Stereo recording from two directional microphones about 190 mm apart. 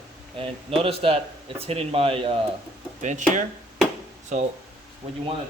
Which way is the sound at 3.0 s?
40° right (ahead or behind).